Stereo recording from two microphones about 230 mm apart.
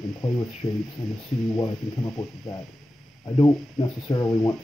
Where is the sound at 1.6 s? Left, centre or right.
Centre.